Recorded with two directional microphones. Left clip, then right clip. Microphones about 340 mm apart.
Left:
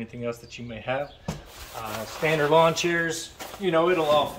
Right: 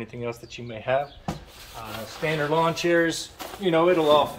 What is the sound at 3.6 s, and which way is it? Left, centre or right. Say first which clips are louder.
Speech: right 2 dB; centre.